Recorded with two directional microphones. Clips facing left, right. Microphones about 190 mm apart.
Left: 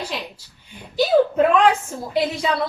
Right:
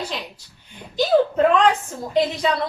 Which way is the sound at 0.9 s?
10° left (ahead or behind).